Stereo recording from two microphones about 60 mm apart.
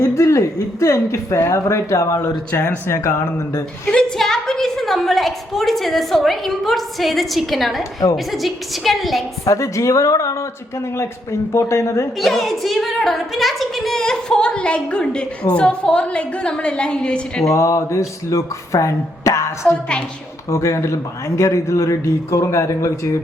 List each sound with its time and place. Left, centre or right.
0.0 s speech: left
2.5 s speech: left
2.8 s speech: left
4.2 s a woman's voice: centre
9.5 s speech: left
10.9 s speech: left
12.2 s a woman's voice: centre
17.4 s speech: left